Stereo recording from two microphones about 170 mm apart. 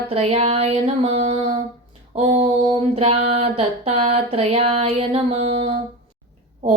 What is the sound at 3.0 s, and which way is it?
Female singing, 35° right (ahead or behind).